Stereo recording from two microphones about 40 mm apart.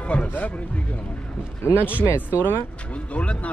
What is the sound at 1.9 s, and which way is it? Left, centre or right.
Speech, left.